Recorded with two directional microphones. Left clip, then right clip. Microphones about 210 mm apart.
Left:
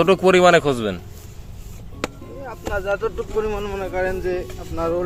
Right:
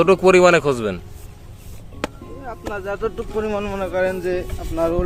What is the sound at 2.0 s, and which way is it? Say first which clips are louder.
Music: even; 5° right (ahead or behind).